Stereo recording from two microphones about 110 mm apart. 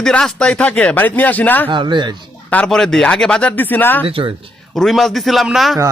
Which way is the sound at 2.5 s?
5° left (ahead or behind).